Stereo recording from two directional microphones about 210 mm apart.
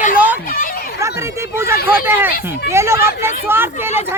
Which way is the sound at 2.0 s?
10° right (ahead or behind).